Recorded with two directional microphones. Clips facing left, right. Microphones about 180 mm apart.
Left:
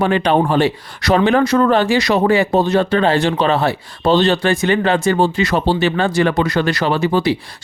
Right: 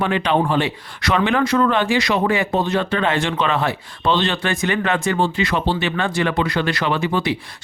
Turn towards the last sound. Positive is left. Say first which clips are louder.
# left 4 dB
turn(degrees=35)  # may be behind; listen again after turning